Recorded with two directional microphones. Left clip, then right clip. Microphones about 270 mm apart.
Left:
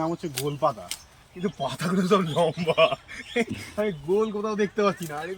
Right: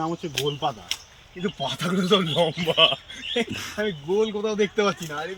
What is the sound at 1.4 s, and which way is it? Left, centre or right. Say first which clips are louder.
Speech: right 1 dB; centre.